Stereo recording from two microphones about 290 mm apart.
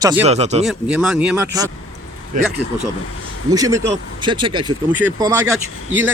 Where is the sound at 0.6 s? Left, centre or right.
Centre.